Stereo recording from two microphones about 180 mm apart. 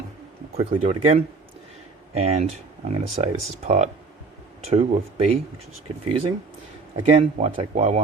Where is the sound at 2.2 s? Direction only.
35° right (ahead or behind).